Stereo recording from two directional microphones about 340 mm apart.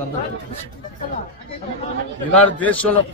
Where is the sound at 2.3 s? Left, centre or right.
Centre.